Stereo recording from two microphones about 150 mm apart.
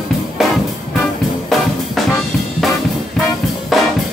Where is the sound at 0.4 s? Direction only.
Centre (ahead or behind).